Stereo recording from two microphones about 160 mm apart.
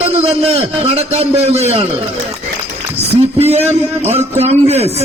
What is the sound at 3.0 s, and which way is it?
A man's voice, 40° right (ahead or behind).